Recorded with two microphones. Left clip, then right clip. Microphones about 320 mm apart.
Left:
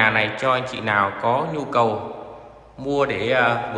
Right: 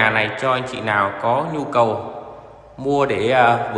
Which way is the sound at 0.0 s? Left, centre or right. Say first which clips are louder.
Right 1 dB; centre.